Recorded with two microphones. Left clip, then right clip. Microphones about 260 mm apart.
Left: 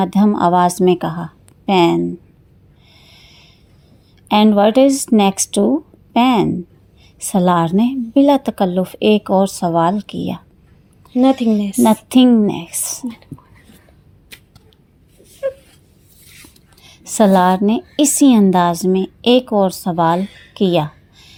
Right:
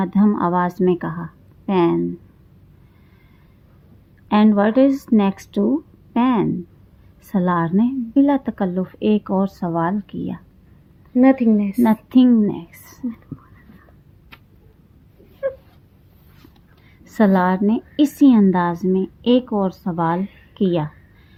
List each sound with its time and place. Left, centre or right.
0.0 s a woman's voice: left
4.3 s a woman's voice: left
11.1 s speech: centre
11.8 s a woman's voice: left
13.3 s whispering: centre
17.0 s a woman's voice: centre